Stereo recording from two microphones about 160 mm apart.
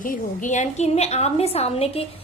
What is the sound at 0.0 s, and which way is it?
A woman's voice, 50° left (ahead or behind).